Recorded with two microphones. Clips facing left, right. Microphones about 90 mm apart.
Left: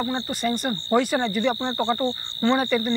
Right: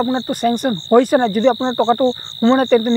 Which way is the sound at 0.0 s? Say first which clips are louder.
Right 8 dB; 50° right (ahead or behind).